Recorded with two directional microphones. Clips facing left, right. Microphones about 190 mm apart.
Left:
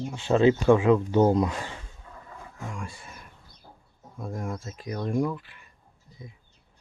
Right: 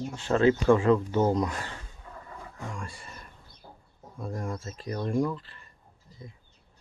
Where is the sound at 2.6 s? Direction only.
Centre (ahead or behind).